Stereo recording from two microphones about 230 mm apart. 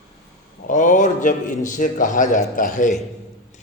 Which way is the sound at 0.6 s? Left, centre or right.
Left.